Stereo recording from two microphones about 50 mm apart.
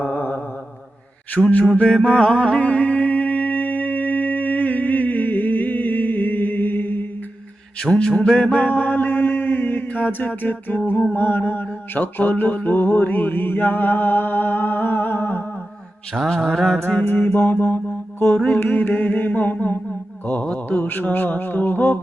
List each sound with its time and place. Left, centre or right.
0.0 s a sound: left
1.4 s speech: left
1.7 s music: left
7.8 s mantra: left
11.1 s music: left
11.9 s a sound: left
16.2 s mantra: centre
17.3 s mantra: left
18.6 s mantra: left
20.2 s speech: left
20.8 s mantra: left